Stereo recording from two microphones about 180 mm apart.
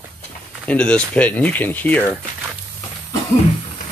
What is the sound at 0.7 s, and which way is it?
Speech, 5° left (ahead or behind).